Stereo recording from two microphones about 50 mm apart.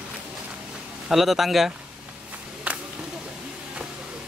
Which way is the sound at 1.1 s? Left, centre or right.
Centre.